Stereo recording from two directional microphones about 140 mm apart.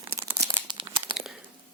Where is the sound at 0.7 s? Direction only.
35° right (ahead or behind).